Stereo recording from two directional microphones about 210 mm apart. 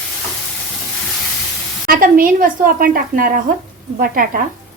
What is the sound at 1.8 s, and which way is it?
A woman's voice, 40° right (ahead or behind).